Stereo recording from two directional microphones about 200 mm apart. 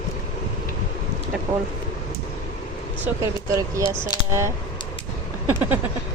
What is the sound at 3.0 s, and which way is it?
Speech, 15° right (ahead or behind).